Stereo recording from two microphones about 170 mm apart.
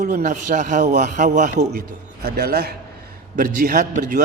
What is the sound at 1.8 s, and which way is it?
Speech, 65° right (ahead or behind).